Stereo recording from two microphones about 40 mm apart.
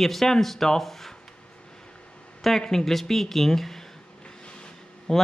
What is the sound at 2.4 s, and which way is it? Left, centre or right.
Speech, centre.